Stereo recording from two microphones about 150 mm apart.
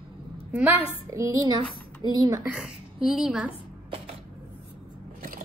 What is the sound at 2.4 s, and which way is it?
A woman's voice, 5° right (ahead or behind).